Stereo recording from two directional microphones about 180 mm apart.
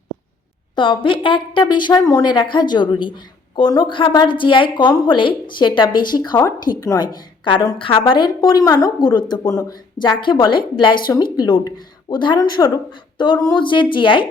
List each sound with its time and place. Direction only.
0.8 s a woman's voice: 30° left (ahead or behind)